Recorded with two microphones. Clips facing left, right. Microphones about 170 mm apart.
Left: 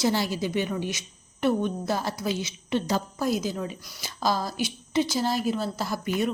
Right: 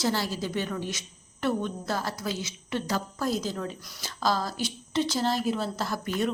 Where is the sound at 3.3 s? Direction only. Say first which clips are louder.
Left 3 dB; 10° left (ahead or behind).